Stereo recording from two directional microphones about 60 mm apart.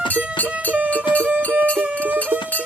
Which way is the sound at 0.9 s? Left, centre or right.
Left.